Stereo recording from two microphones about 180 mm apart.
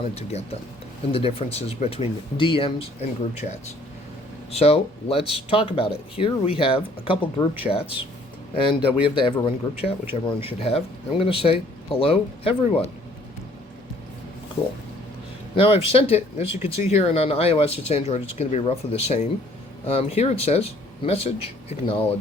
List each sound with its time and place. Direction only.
0.0 s speech: 35° left (ahead or behind)
15.5 s speech: 30° left (ahead or behind)